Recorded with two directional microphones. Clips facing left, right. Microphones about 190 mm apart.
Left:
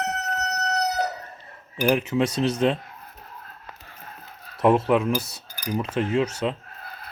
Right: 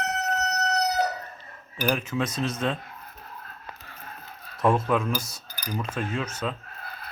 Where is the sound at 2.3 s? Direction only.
70° left (ahead or behind).